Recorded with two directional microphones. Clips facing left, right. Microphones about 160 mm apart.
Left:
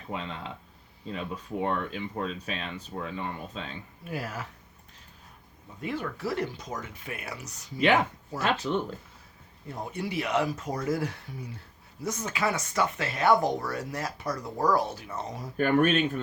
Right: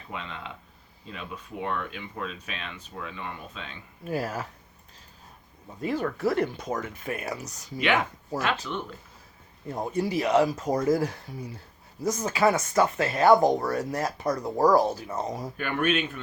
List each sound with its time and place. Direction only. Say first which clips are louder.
0.1 s speech: left 2 dB; 35° left (ahead or behind)
4.0 s speech: right 6 dB; 40° right (ahead or behind)
5.8 s speech: right 6 dB; 40° right (ahead or behind)
8.7 s speech: left 5 dB; 35° left (ahead or behind)
9.7 s speech: right 5 dB; 40° right (ahead or behind)
15.5 s speech: left 5 dB; 40° left (ahead or behind)